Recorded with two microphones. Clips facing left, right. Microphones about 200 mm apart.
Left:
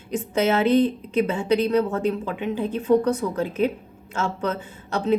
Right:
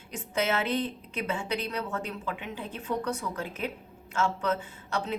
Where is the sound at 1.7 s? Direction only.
40° left (ahead or behind).